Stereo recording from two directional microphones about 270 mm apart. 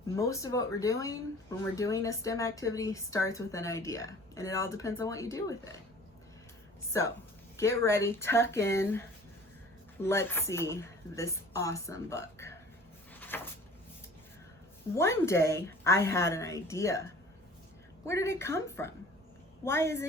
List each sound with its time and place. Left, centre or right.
0.2 s speech: centre
6.9 s speech: centre
13.1 s a sound: centre
14.9 s speech: centre
18.0 s speech: centre